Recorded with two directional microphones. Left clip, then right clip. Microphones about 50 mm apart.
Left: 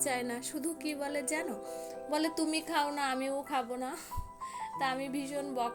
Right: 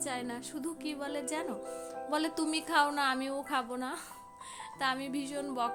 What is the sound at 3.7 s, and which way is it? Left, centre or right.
A woman's voice, right.